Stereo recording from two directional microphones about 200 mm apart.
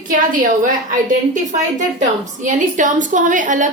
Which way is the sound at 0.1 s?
40° right (ahead or behind).